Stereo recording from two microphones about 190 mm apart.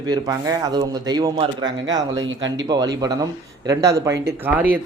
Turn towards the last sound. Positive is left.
turn(degrees=-10)  # may be behind; listen again after turning